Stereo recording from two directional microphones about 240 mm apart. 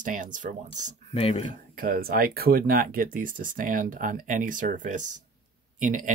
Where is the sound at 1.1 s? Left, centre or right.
Left.